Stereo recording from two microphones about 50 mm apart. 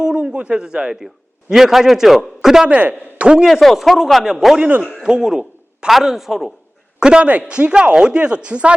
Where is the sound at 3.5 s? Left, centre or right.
Centre.